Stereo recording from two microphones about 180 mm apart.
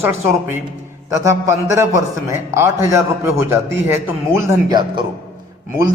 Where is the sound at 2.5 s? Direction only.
15° right (ahead or behind).